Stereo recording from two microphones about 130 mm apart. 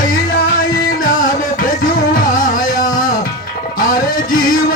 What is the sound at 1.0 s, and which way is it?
Music, 90° left.